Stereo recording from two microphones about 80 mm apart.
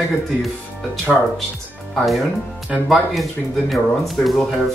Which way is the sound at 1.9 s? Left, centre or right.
Centre.